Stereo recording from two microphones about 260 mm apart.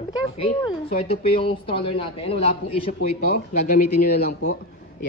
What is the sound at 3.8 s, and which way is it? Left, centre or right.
Speech, left.